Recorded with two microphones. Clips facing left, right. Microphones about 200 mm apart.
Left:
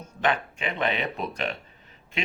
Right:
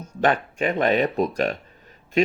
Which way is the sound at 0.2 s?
45° right (ahead or behind).